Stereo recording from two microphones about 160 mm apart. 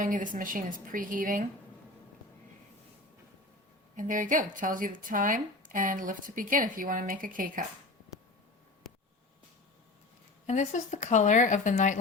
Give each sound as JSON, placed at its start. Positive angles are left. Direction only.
{"t": 0.0, "sound": "speech", "side_deg": -55}
{"t": 3.9, "sound": "speech", "side_deg": -55}
{"t": 10.4, "sound": "speech", "side_deg": 45}